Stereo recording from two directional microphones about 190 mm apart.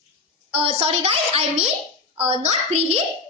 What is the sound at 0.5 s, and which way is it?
A child's voice, 30° right (ahead or behind).